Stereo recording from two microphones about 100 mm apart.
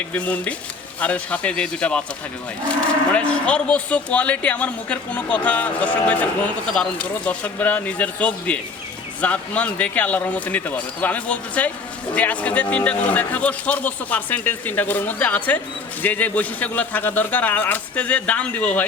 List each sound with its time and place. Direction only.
0.1 s cattle: 15° left (ahead or behind)